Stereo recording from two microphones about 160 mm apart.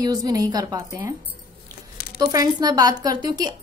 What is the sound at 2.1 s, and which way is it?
A woman's voice, 25° right (ahead or behind).